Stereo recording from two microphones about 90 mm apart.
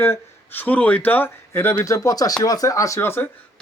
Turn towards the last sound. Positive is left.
turn(degrees=30)  # may be behind; listen again after turning